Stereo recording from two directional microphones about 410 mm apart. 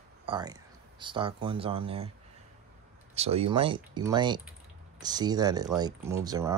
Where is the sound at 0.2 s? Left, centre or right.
Centre.